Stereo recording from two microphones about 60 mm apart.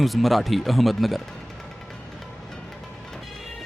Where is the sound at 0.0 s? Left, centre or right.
Centre.